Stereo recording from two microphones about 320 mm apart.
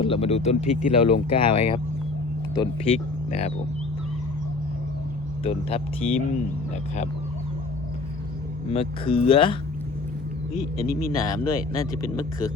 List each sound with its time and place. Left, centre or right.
0.0 s speech: centre
5.4 s speech: centre
8.7 s speech: centre
11.1 s speech: centre